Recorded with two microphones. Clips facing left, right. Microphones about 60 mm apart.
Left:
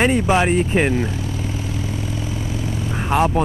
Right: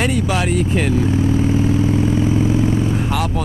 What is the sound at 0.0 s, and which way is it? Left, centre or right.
Speech, left.